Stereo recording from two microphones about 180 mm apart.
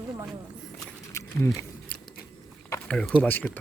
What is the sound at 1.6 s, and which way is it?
Scissors, 10° left (ahead or behind).